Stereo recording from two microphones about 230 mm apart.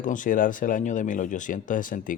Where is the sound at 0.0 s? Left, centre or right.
Left.